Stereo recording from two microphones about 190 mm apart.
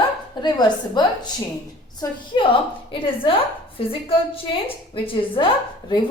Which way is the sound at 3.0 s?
30° left (ahead or behind).